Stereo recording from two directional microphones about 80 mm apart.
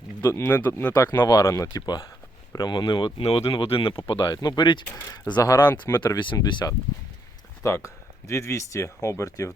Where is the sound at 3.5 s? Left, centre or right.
Left.